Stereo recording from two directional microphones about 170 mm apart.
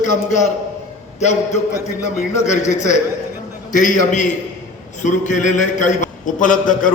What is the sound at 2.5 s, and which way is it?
A man's voice, 45° left (ahead or behind).